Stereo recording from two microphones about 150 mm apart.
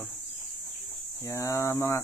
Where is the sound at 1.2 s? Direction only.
20° left (ahead or behind).